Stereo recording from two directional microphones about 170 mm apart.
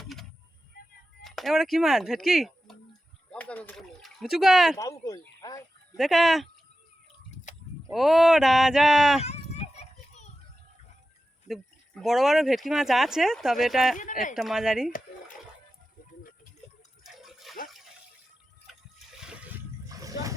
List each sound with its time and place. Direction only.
0.0 s a sound: centre (ahead or behind)
1.2 s speech: centre (ahead or behind)
4.8 s speech: 20° left (ahead or behind)
6.0 s speech: centre (ahead or behind)
7.5 s sheep: 45° left (ahead or behind)
7.9 s speech: centre (ahead or behind)
9.2 s children playing: 40° left (ahead or behind)
11.4 s speech: centre (ahead or behind)
13.9 s speech: 50° left (ahead or behind)
14.3 s speech: 5° right (ahead or behind)
17.0 s water: centre (ahead or behind)
18.7 s water: centre (ahead or behind)
19.9 s a sound: 20° right (ahead or behind)